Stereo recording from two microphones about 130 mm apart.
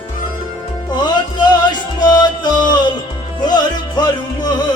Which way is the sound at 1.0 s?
30° left (ahead or behind).